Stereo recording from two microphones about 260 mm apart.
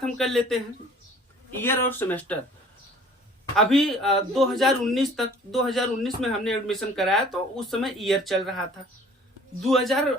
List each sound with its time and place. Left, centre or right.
0.0 s a man's voice: centre
1.6 s speech: centre
3.5 s a man's voice: centre
9.6 s a man's voice: centre